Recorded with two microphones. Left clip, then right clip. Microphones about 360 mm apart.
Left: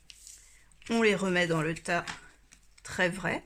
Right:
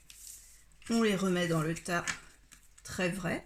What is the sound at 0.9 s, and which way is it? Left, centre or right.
Speech, left.